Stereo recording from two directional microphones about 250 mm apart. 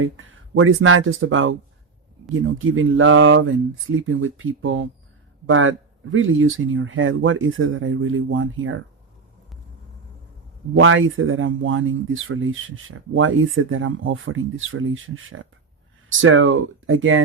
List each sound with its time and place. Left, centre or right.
0.0 s speech: right
10.8 s speech: right